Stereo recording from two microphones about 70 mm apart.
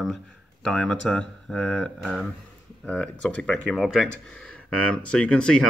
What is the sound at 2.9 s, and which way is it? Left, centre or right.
Speech, centre.